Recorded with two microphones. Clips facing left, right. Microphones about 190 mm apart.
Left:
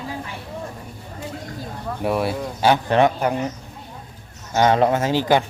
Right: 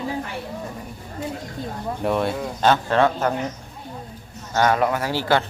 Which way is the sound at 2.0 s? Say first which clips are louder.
Left 1 dB; 5° left (ahead or behind).